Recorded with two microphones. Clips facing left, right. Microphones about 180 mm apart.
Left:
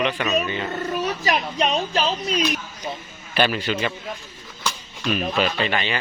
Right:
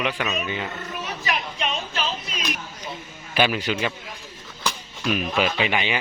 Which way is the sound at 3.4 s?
10° right (ahead or behind).